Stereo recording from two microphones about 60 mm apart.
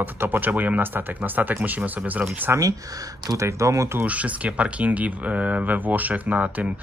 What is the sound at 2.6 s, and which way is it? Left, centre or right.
Speech, right.